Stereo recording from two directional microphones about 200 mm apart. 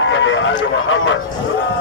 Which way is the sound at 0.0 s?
70° left (ahead or behind).